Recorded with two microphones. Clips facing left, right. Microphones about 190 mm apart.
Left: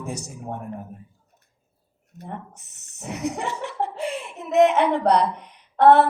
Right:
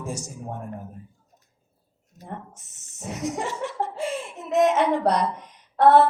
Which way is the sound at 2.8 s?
65° left (ahead or behind).